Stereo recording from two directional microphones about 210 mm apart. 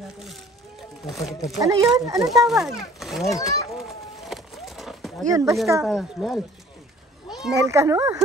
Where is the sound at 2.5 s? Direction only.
Centre (ahead or behind).